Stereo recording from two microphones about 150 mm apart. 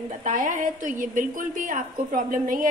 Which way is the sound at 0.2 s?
65° right (ahead or behind).